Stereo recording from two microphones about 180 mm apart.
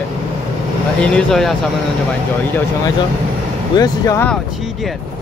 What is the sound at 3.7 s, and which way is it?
Speech, 20° left (ahead or behind).